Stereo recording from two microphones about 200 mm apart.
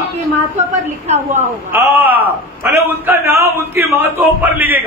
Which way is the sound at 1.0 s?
35° right (ahead or behind).